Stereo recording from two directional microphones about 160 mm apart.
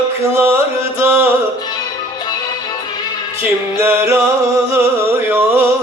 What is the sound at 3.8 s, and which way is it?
Music, 15° right (ahead or behind).